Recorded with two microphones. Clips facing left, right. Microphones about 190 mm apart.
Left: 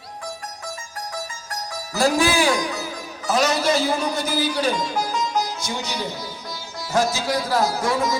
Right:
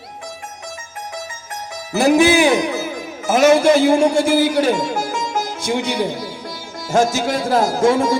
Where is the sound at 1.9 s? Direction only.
20° right (ahead or behind).